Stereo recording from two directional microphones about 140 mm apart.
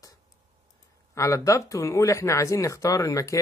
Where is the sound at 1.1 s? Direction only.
20° left (ahead or behind).